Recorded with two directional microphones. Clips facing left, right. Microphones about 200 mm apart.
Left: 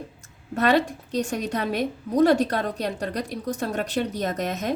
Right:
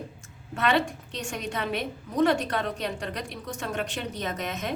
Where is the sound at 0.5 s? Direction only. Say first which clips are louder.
Left 4 dB; 40° left (ahead or behind).